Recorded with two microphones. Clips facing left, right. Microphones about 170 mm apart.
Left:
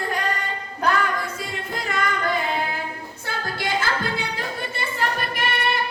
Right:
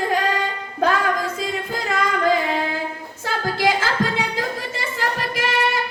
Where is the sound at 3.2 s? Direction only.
90° right.